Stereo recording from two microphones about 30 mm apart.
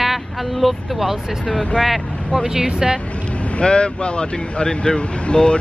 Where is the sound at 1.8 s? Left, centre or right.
Centre.